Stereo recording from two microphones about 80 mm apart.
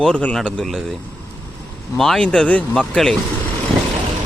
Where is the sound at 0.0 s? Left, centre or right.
Centre.